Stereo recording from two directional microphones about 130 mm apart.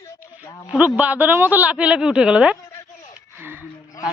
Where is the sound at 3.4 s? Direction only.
15° right (ahead or behind).